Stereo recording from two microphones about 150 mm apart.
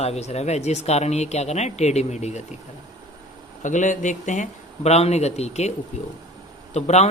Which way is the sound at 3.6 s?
55° left (ahead or behind).